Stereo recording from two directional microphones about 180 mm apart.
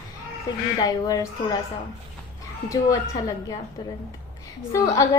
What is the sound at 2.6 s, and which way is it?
Speech, 20° left (ahead or behind).